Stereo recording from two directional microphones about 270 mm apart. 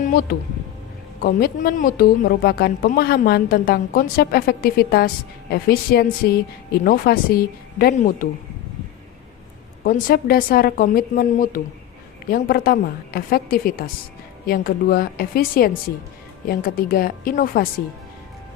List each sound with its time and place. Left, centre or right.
0.0 s speech: left
9.8 s speech: left